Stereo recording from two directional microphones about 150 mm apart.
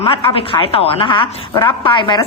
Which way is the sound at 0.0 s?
35° left (ahead or behind).